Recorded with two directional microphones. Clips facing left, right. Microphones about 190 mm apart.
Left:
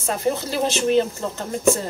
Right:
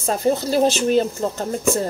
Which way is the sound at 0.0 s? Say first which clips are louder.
Right 3 dB; 35° right (ahead or behind).